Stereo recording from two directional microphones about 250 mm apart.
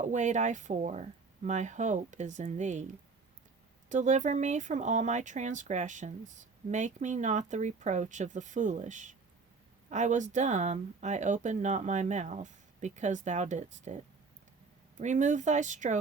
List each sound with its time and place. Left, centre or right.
0.0 s speech: right
3.8 s speech: right